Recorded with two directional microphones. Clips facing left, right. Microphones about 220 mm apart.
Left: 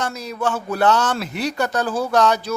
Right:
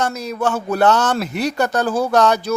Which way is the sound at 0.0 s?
45° right (ahead or behind).